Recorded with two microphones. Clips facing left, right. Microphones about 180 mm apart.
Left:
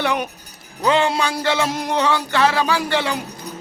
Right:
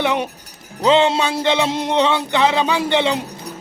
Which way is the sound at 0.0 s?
20° right (ahead or behind).